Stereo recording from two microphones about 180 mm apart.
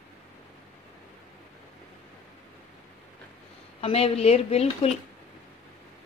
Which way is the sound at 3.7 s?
35° left (ahead or behind).